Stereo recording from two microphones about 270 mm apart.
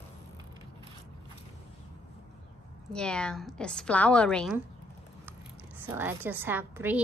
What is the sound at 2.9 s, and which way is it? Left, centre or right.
A woman's voice, centre.